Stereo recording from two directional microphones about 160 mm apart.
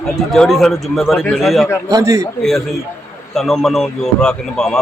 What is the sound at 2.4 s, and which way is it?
Speech, centre (ahead or behind).